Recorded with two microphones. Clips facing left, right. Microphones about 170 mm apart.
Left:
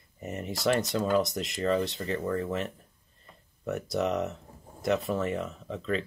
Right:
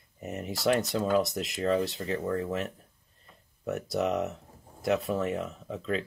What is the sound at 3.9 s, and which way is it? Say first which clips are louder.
Speech: even; 5° right (ahead or behind).